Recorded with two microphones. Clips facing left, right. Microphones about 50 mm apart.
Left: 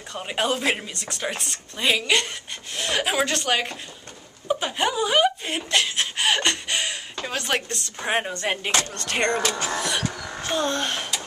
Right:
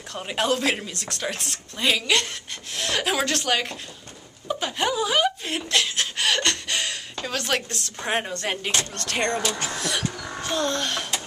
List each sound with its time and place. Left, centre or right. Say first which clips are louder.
0.1 s a woman's voice: right 1 dB; centre
9.5 s speech: left 2 dB; left
9.8 s speech: left 1 dB; centre